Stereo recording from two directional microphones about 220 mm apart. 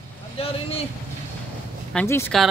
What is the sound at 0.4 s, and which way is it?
Speech, 25° left (ahead or behind).